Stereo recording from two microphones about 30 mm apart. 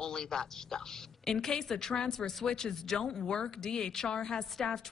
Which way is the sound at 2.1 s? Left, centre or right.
Centre.